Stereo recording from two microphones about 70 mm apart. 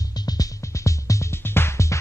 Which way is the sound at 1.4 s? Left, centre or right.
Left.